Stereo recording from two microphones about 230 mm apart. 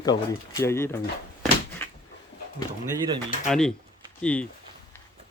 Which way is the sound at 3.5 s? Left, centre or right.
Centre.